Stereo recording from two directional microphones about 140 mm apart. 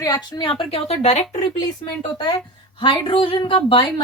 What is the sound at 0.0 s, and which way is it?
A woman's voice, 30° left (ahead or behind).